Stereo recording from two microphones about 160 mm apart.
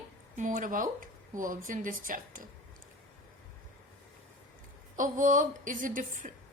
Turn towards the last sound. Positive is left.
turn(degrees=-55)  # may be behind; listen again after turning